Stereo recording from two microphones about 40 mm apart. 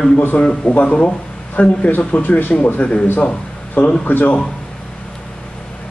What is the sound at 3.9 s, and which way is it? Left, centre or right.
Speech, left.